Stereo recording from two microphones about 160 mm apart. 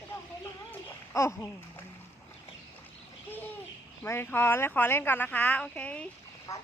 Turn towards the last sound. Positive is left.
turn(degrees=20)  # may be behind; listen again after turning